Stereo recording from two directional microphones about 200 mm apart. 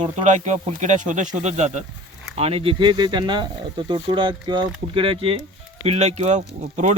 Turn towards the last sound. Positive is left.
turn(degrees=-35)  # may be behind; listen again after turning